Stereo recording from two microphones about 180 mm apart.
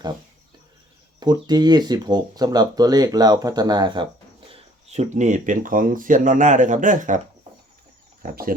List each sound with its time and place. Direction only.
1.2 s speech: 20° right (ahead or behind); by 7.2 s 45° right (ahead or behind)
8.2 s speech: 50° right (ahead or behind)